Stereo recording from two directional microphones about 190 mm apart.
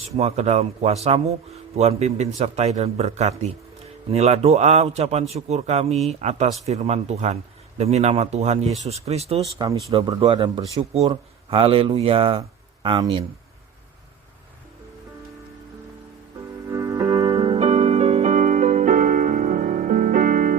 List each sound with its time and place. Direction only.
0.2 s speech: 35° right (ahead or behind)
16.6 s music: 15° right (ahead or behind); by 20.6 s 45° right (ahead or behind)